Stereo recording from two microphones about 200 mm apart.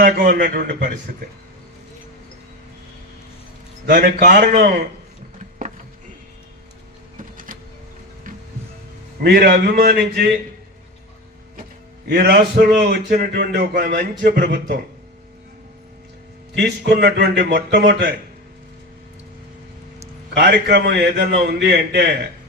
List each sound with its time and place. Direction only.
0.0 s a man's voice: 45° right (ahead or behind)
3.8 s a man's voice: 50° right (ahead or behind)
9.2 s a man's voice: 50° right (ahead or behind)
12.0 s a man's voice: 50° right (ahead or behind)
16.6 s a man's voice: 55° right (ahead or behind)
20.3 s a man's voice: 55° right (ahead or behind)